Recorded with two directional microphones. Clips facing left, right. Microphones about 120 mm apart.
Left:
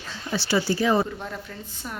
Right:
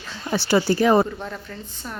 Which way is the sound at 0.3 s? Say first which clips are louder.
Right 4 dB; 50° right (ahead or behind).